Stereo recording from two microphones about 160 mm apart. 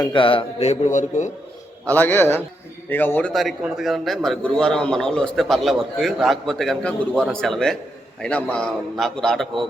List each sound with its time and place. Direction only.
0.1 s a man's voice: 35° left (ahead or behind); by 1.3 s 50° left (ahead or behind)
1.9 s a man's voice: 10° left (ahead or behind)